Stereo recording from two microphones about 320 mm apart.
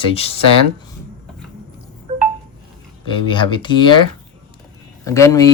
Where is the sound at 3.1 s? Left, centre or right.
Centre.